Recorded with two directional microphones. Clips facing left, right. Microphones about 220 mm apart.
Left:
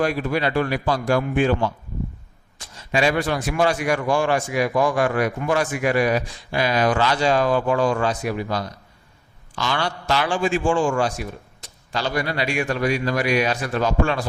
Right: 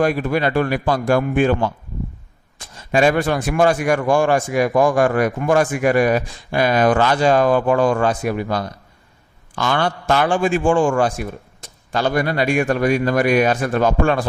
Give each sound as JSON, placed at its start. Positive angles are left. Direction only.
{"t": 0.0, "sound": "a man's voice", "side_deg": -50}